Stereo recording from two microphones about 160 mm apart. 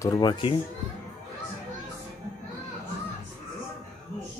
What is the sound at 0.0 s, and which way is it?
Speech, 25° left (ahead or behind).